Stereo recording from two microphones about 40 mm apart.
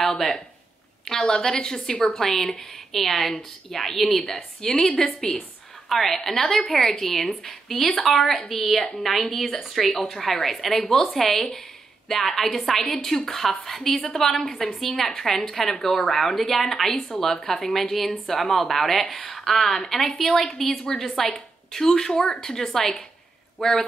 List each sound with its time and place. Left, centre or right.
0.0 s a sound: centre
1.2 s a woman's voice: centre
4.7 s a woman's voice: centre
5.9 s a woman's voice: centre